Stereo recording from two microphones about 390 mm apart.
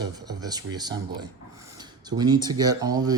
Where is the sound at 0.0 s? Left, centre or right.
Centre.